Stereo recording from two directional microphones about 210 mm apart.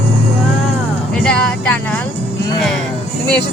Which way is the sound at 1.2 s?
5° left (ahead or behind).